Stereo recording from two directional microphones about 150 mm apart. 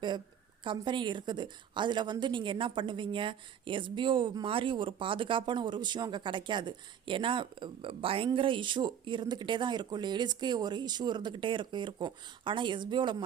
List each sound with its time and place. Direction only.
0.6 s a woman's voice: 30° right (ahead or behind)